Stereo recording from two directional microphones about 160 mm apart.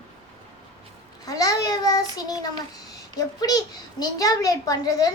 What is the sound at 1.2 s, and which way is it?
Child singing, 20° left (ahead or behind).